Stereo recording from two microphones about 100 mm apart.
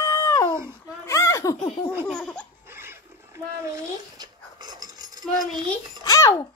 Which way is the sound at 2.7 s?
25° right (ahead or behind).